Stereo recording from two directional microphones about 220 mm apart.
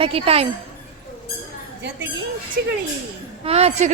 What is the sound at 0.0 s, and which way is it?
Speech, 25° right (ahead or behind).